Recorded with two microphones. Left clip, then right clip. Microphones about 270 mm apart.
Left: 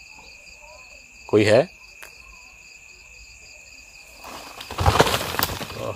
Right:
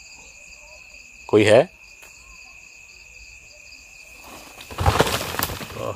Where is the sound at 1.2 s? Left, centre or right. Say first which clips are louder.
Right 2 dB; centre.